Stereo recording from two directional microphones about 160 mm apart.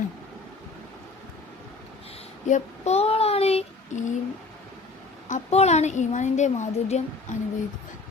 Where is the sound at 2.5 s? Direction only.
45° left (ahead or behind).